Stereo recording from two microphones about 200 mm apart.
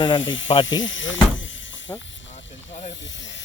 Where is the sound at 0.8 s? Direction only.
70° left (ahead or behind).